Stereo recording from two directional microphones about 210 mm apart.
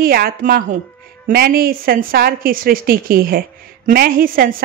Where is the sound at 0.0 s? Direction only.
45° right (ahead or behind).